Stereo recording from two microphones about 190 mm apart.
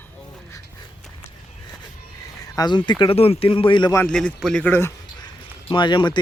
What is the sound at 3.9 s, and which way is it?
A man's voice, 10° left (ahead or behind).